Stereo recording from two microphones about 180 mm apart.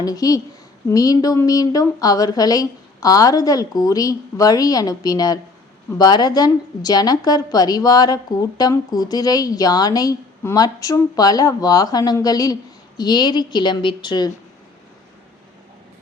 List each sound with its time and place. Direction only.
0.0 s a woman's voice: 20° left (ahead or behind)